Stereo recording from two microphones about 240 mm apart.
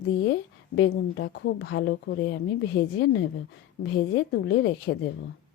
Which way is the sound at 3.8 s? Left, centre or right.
Left.